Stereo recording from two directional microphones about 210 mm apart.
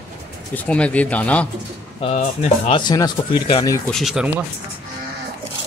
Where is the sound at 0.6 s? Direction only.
5° left (ahead or behind).